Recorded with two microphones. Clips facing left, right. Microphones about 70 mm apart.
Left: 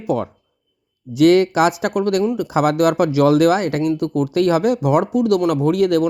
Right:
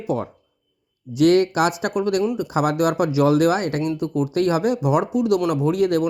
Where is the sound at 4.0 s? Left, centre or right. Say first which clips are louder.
Left 3 dB; left.